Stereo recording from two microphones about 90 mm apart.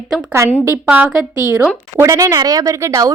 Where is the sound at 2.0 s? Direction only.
35° right (ahead or behind).